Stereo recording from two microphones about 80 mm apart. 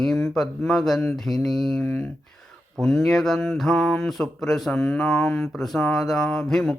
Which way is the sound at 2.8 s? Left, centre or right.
Centre.